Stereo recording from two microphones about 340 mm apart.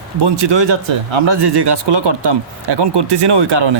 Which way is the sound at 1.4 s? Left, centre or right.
Right.